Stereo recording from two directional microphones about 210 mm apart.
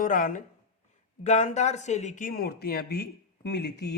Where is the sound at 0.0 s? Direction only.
40° left (ahead or behind).